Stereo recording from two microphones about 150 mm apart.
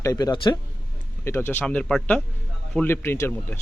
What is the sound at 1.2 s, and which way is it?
A man's voice, 15° left (ahead or behind).